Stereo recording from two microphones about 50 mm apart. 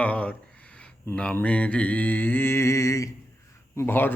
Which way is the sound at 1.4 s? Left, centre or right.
Left.